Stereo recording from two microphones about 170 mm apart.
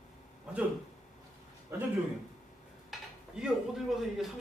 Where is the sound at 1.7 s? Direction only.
15° right (ahead or behind).